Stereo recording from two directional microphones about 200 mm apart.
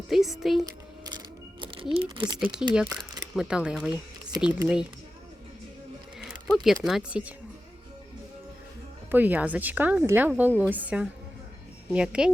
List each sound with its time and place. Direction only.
0.1 s speech: centre (ahead or behind)
0.6 s a sound: 20° right (ahead or behind)
2.0 s speech: 20° right (ahead or behind)
2.4 s speech: 5° right (ahead or behind)
6.7 s speech: centre (ahead or behind)
9.0 s a woman's voice: 10° right (ahead or behind)